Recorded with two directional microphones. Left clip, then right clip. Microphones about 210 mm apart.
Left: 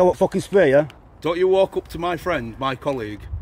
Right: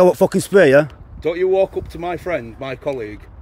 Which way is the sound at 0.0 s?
30° right (ahead or behind).